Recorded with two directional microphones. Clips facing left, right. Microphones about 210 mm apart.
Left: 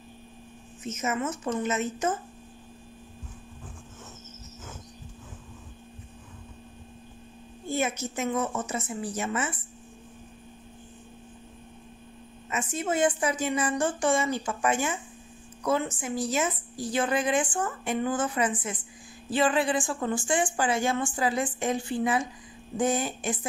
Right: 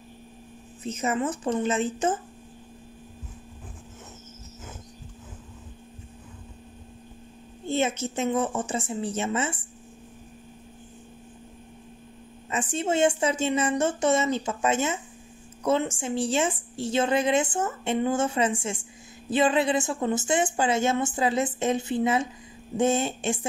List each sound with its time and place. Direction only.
0.8 s speech: 35° right (ahead or behind)
7.6 s a woman's voice: 25° right (ahead or behind)
12.4 s a woman's voice: 30° right (ahead or behind)